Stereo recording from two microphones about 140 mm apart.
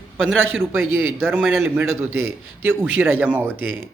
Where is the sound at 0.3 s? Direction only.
15° right (ahead or behind).